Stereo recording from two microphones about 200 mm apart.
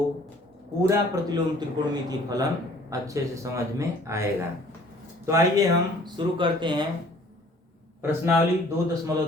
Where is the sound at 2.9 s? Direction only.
15° right (ahead or behind).